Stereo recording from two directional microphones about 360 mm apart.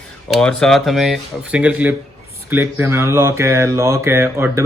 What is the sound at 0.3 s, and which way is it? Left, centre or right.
Speech, centre.